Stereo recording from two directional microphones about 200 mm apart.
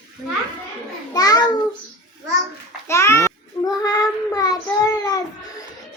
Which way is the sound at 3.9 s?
20° left (ahead or behind).